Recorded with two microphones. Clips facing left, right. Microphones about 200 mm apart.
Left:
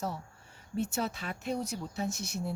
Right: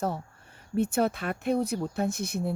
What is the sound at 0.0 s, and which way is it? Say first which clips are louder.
Speech: right 6 dB; 55° right (ahead or behind).